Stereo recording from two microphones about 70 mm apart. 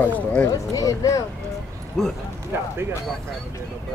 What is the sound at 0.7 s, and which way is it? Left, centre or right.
Speech, left.